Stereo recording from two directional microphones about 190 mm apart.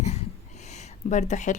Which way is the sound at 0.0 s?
35° left (ahead or behind).